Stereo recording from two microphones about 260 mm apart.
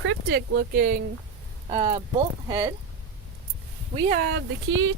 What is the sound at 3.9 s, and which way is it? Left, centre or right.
Speech, right.